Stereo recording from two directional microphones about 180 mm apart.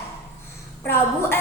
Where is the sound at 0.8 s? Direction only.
15° left (ahead or behind).